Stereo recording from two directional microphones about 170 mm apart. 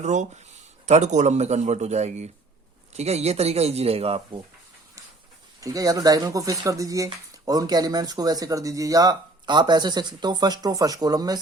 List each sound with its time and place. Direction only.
0.0 s a man's voice: 45° right (ahead or behind)
5.5 s speech: 20° right (ahead or behind)